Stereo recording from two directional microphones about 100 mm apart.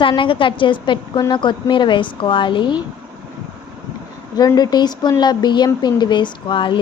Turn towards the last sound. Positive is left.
turn(degrees=55)  # may be behind; listen again after turning